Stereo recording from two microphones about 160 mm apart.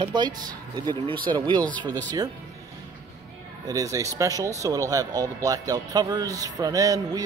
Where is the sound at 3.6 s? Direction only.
20° right (ahead or behind).